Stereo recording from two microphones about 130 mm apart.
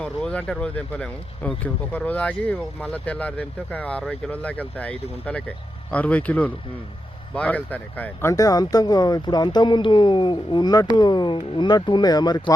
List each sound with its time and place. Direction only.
0.0 s speech: 5° left (ahead or behind)
8.3 s speech: 25° left (ahead or behind)